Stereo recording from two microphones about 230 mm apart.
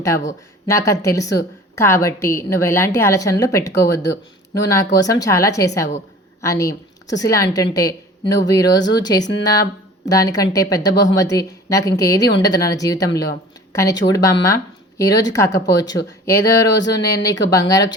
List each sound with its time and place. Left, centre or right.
0.7 s a woman's voice: centre
17.0 s speech: left
17.5 s a woman's voice: centre